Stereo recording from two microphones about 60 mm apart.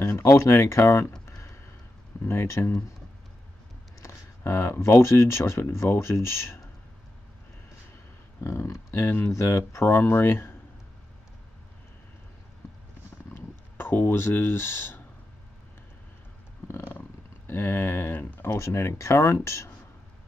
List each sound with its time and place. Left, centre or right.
0.0 s speech: left
2.2 s speech: left
4.0 s speech: left
8.5 s speech: left
13.3 s speech: left
16.6 s purr: left
17.5 s speech: left
18.6 s speech: left